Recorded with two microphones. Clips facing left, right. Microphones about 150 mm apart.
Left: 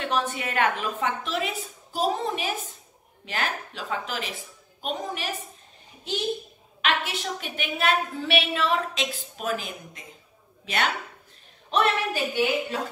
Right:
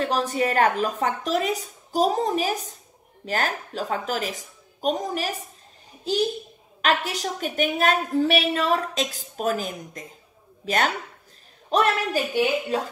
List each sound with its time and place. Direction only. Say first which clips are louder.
0.0 s a woman's voice: right 4 dB; 35° right (ahead or behind)